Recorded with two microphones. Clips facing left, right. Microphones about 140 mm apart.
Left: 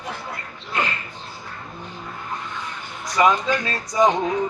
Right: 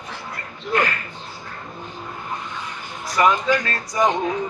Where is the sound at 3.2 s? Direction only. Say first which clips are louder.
Even; 20° left (ahead or behind).